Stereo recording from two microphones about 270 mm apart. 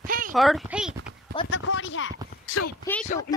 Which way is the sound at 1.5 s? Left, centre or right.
Left.